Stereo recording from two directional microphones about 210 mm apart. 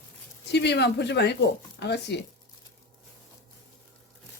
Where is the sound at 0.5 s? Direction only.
55° left (ahead or behind).